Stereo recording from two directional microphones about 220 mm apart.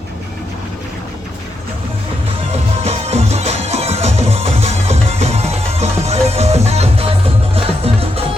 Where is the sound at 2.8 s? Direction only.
30° right (ahead or behind).